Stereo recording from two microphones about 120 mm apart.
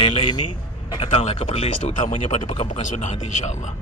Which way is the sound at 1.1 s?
65° left (ahead or behind).